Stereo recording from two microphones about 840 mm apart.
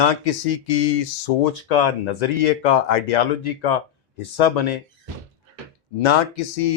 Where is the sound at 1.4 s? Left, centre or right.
Left.